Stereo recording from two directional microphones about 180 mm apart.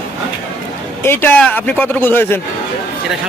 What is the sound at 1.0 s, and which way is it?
Speech, 10° left (ahead or behind).